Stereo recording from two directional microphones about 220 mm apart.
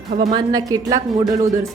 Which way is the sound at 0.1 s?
35° right (ahead or behind).